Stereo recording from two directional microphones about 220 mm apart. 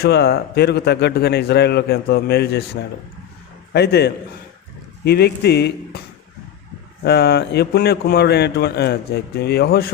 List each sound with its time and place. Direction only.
0.0 s speech: 50° left (ahead or behind)
3.7 s a man's voice: 50° left (ahead or behind)
7.0 s speech: 45° left (ahead or behind)